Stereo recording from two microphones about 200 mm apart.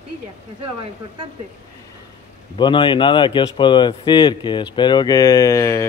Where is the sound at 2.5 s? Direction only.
25° left (ahead or behind).